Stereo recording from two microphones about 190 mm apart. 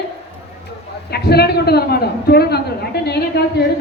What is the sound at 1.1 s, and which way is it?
A man's voice, 55° left (ahead or behind).